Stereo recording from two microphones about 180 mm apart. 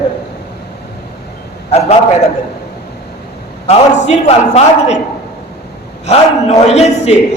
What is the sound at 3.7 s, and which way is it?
A man's voice, 35° left (ahead or behind).